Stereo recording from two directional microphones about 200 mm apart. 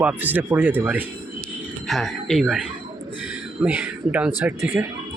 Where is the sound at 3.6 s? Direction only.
5° right (ahead or behind).